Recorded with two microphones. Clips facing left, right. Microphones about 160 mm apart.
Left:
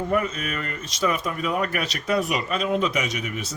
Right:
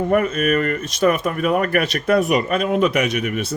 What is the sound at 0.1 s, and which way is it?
Speech, 55° right (ahead or behind).